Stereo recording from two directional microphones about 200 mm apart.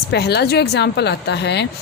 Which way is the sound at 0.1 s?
55° left (ahead or behind).